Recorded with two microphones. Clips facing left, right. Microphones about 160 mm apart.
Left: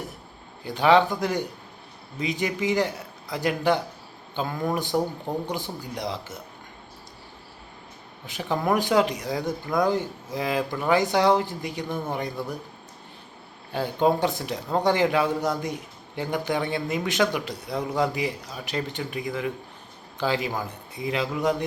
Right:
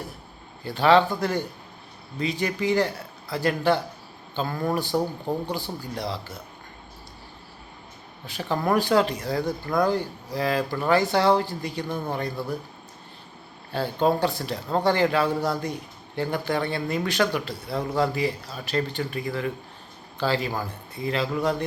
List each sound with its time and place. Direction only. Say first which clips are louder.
0.6 s speech: even; 15° left (ahead or behind)
8.3 s speech: even; 15° left (ahead or behind)
13.7 s speech: even; 15° left (ahead or behind)